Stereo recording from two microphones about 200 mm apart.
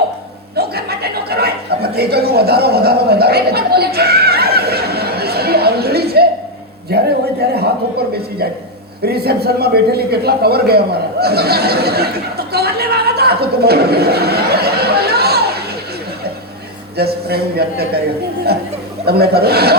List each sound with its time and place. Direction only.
0.5 s chuckle: 50° right (ahead or behind)
6.9 s a man's voice: 50° right (ahead or behind)
9.0 s a man's voice: 50° right (ahead or behind)
17.0 s a man's voice: 50° right (ahead or behind)
19.0 s a man's voice: 50° right (ahead or behind)